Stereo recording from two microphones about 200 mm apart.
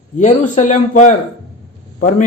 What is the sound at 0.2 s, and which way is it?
A man's voice, 35° left (ahead or behind).